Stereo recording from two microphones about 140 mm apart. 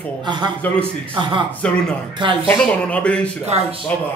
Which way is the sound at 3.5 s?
50° right (ahead or behind).